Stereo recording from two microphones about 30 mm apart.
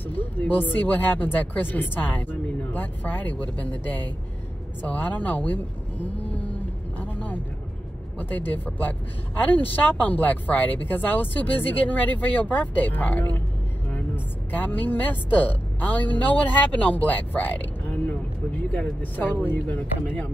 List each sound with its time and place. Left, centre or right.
0.4 s speech: left
6.3 s vehicle: left
8.2 s speech: left
9.4 s speech: left
14.5 s speech: left
19.2 s speech: left
19.5 s speech: left